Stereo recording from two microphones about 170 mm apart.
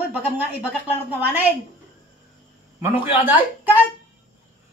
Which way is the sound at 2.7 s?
15° right (ahead or behind).